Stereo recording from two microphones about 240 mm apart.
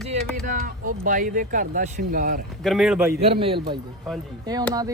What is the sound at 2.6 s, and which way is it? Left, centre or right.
Speech, centre.